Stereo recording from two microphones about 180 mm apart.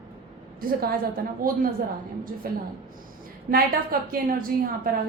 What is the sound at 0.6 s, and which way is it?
Speech, 55° right (ahead or behind).